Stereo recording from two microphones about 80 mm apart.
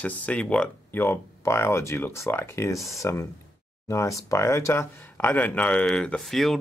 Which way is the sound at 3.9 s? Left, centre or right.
Left.